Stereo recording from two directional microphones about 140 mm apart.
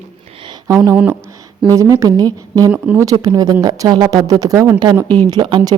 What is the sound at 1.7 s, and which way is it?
Speech, 20° right (ahead or behind).